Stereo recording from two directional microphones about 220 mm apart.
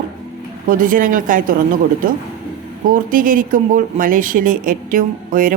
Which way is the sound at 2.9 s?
40° right (ahead or behind).